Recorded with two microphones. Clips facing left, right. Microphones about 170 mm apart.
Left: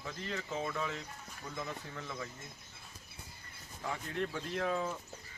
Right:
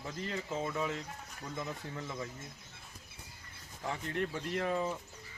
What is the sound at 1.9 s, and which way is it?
Speech, 20° right (ahead or behind).